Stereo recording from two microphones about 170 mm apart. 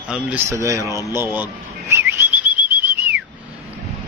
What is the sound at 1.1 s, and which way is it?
Bird, 10° right (ahead or behind).